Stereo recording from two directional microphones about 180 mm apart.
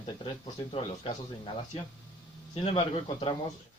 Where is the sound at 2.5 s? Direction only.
30° left (ahead or behind).